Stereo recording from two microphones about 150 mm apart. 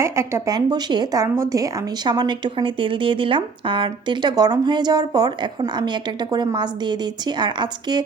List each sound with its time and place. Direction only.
0.0 s speech: 20° right (ahead or behind)